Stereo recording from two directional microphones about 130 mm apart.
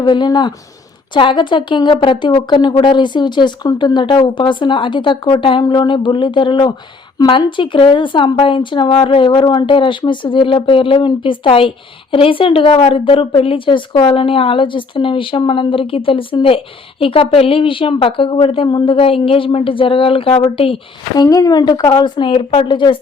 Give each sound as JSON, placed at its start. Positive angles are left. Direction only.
{"t": 0.0, "sound": "a woman's voice", "side_deg": 35}
{"t": 21.2, "sound": "a woman's voice", "side_deg": 30}